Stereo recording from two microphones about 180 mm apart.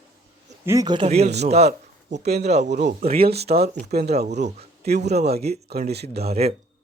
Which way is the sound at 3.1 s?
60° right (ahead or behind).